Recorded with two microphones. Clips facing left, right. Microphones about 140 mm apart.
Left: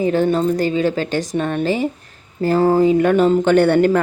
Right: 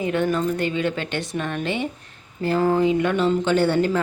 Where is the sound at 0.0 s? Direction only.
35° left (ahead or behind).